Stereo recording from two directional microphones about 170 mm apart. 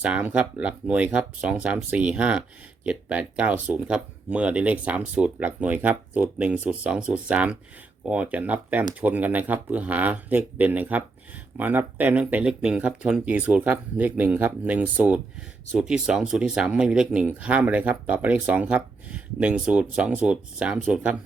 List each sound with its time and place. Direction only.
0.0 s speech: 10° right (ahead or behind)